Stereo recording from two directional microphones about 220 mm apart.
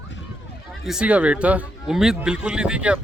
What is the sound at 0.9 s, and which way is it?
Speech, 5° right (ahead or behind).